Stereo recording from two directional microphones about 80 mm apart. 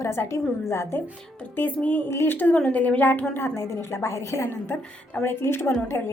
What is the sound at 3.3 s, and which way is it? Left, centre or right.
A woman's voice, left.